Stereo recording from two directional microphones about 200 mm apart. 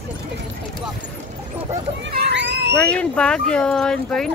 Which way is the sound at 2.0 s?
55° right (ahead or behind).